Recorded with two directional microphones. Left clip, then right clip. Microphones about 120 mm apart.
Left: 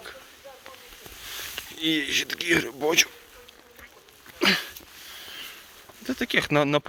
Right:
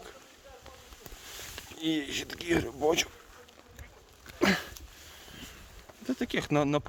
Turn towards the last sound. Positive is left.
turn(degrees=-10)  # may be behind; listen again after turning